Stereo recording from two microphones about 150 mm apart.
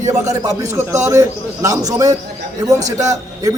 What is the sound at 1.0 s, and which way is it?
A man's voice, 20° right (ahead or behind).